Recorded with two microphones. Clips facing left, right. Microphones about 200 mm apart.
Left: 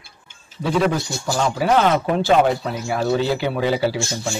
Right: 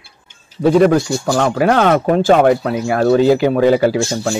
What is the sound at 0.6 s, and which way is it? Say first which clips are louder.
A man's voice: right 9 dB; 55° right (ahead or behind).